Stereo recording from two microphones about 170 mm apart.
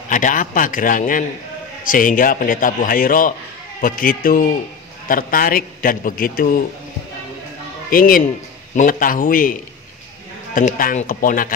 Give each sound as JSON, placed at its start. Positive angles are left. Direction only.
{"t": 0.1, "sound": "a man's voice", "side_deg": 50}
{"t": 7.9, "sound": "a man's voice", "side_deg": 55}